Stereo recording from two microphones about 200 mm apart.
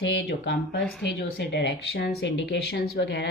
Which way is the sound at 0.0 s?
60° left (ahead or behind).